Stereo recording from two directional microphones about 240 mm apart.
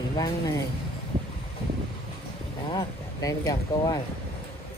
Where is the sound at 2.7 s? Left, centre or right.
Centre.